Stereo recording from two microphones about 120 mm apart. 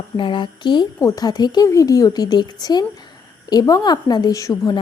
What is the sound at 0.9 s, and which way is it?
Speech, 25° left (ahead or behind).